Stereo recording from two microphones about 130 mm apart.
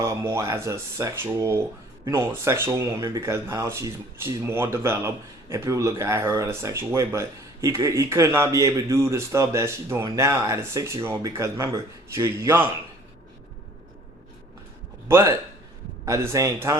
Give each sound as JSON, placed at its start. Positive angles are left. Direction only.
{"t": 0.0, "sound": "speech", "side_deg": -20}
{"t": 15.0, "sound": "a man's voice", "side_deg": -20}